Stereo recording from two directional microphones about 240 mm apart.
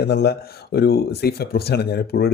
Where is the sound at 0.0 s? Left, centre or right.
Left.